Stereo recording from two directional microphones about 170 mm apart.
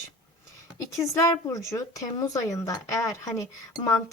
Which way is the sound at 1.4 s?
20° left (ahead or behind).